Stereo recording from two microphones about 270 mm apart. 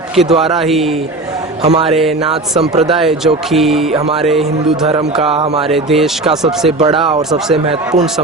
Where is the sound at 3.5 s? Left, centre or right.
Centre.